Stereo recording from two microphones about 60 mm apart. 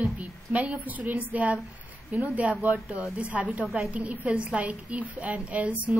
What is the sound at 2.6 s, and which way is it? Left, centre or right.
A woman's voice, right.